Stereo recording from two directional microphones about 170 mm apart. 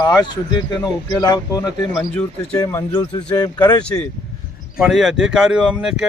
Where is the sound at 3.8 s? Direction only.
5° left (ahead or behind).